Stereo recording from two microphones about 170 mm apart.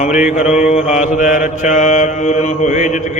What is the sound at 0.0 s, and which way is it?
Mantra, 45° left (ahead or behind).